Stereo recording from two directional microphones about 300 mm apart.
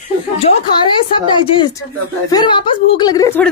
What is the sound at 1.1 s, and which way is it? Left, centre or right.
A woman's voice, centre.